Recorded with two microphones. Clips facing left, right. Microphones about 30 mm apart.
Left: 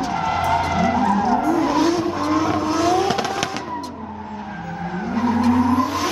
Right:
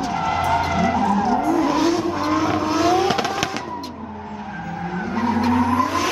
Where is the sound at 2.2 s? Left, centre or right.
Centre.